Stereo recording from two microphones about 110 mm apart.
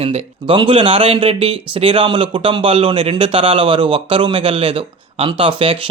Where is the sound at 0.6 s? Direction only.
55° right (ahead or behind).